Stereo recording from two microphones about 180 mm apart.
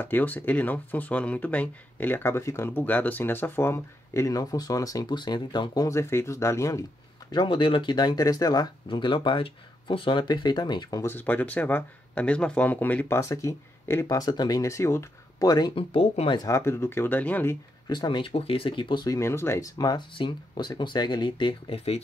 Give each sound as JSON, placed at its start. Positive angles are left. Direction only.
{"t": 0.0, "sound": "speech", "side_deg": 10}
{"t": 15.9, "sound": "speech", "side_deg": 35}
{"t": 16.4, "sound": "speech", "side_deg": 15}
{"t": 17.8, "sound": "speech", "side_deg": 25}